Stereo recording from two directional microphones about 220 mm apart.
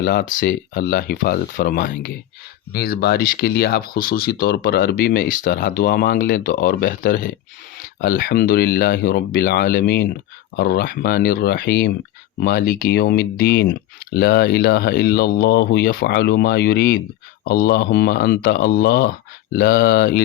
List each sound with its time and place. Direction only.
0.0 s speech: 45° left (ahead or behind)